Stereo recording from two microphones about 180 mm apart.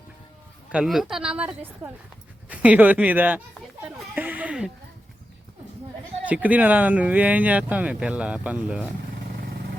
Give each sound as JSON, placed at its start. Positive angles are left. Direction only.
{"t": 0.7, "sound": "a woman's voice", "side_deg": -5}
{"t": 3.8, "sound": "a sound", "side_deg": -10}
{"t": 6.2, "sound": "speech", "side_deg": -10}
{"t": 9.2, "sound": "vehicle", "side_deg": -60}